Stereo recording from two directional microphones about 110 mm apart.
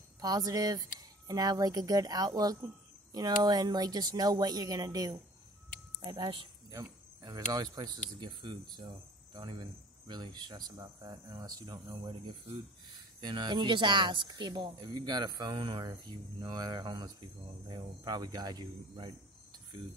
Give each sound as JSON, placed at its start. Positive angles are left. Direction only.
{"t": 0.2, "sound": "speech", "side_deg": -35}
{"t": 6.7, "sound": "speech", "side_deg": -35}